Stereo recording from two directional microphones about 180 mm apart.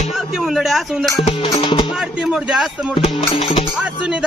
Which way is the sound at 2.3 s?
Centre (ahead or behind).